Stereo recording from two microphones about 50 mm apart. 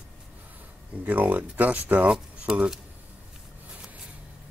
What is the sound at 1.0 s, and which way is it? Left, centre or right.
Speech, right.